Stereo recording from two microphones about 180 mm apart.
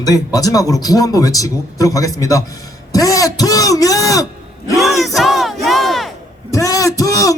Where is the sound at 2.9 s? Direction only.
20° left (ahead or behind).